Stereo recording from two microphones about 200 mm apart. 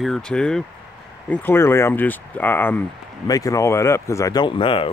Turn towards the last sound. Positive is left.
turn(degrees=25)  # may be behind; listen again after turning